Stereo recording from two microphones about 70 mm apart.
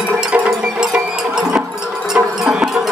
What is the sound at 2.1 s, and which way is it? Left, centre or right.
Music, centre.